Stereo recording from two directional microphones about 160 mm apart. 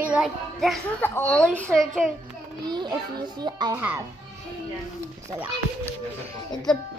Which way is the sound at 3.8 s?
15° right (ahead or behind).